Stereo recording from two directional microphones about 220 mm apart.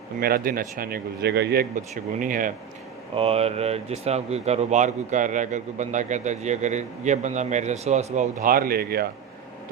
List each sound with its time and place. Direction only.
0.2 s speech: 40° right (ahead or behind)
3.2 s speech: 25° right (ahead or behind); by 9.0 s 45° right (ahead or behind)